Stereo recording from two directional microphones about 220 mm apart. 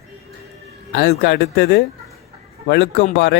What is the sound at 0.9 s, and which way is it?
Speech, 45° left (ahead or behind).